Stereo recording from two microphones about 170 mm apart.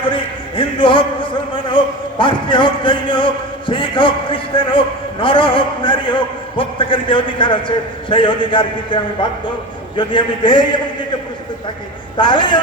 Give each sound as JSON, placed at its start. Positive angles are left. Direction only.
{"t": 0.0, "sound": "a man's voice", "side_deg": 30}
{"t": 10.0, "sound": "a man's voice", "side_deg": 30}
{"t": 12.1, "sound": "a man's voice", "side_deg": 30}